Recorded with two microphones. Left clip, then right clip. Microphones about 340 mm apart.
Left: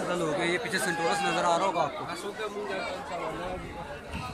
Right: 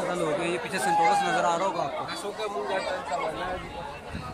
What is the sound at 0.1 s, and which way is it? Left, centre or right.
Speech, centre.